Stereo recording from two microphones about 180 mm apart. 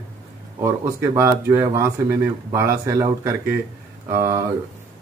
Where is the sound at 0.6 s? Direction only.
15° right (ahead or behind).